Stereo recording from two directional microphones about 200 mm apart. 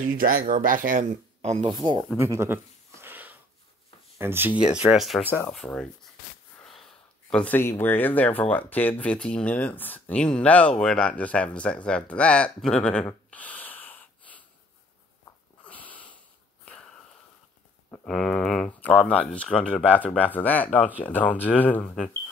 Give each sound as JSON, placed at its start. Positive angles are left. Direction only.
{"t": 0.0, "sound": "speech", "side_deg": -45}
{"t": 1.7, "sound": "speech", "side_deg": -20}
{"t": 2.1, "sound": "a sound", "side_deg": -15}
{"t": 4.2, "sound": "speech", "side_deg": -10}
{"t": 13.3, "sound": "snort", "side_deg": 5}
{"t": 15.6, "sound": "sniff", "side_deg": 10}
{"t": 16.6, "sound": "a sound", "side_deg": 5}
{"t": 17.9, "sound": "speech", "side_deg": 0}